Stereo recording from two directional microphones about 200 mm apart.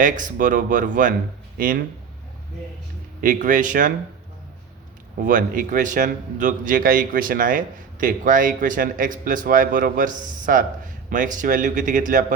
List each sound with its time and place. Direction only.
0.0 s a man's voice: 40° right (ahead or behind)
3.2 s a man's voice: 40° right (ahead or behind)
5.2 s a man's voice: 45° right (ahead or behind)